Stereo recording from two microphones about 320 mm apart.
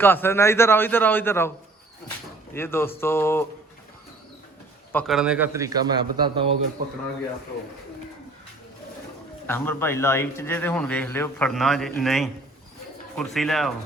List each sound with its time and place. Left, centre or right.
0.0 s a man's voice: centre
2.6 s a man's voice: centre
4.9 s a man's voice: centre
9.5 s a man's voice: centre